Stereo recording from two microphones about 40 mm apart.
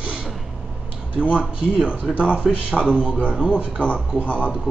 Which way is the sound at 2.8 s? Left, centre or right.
Right.